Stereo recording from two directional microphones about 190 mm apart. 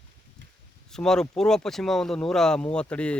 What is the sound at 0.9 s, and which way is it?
Speech, 5° left (ahead or behind).